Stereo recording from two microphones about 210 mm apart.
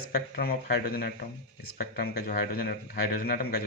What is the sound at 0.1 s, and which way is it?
A man's voice, 45° left (ahead or behind).